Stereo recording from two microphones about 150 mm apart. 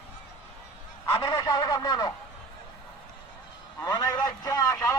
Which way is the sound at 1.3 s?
25° left (ahead or behind).